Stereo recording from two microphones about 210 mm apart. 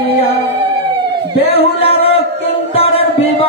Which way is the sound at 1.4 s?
25° left (ahead or behind).